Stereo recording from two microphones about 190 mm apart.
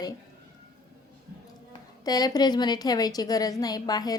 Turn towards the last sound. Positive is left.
turn(degrees=20)  # may be behind; listen again after turning